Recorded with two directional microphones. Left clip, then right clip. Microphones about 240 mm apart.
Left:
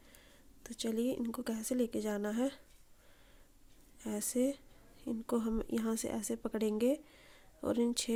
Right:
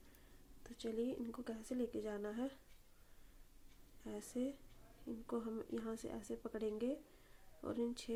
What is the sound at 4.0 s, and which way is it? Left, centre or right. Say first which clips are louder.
A woman's voice: left 10 dB; left.